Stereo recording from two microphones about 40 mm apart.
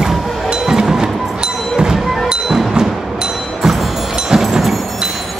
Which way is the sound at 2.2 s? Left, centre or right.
Centre.